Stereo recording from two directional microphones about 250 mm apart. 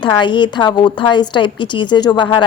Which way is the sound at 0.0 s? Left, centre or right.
Centre.